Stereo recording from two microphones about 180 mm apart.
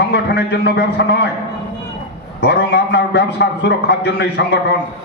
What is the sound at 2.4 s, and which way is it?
A man's voice, 70° left (ahead or behind).